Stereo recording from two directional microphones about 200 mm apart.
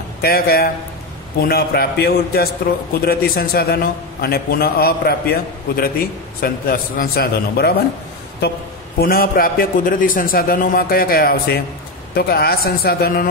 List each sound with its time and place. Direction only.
0.2 s a man's voice: 50° left (ahead or behind)
9.0 s a man's voice: 45° left (ahead or behind)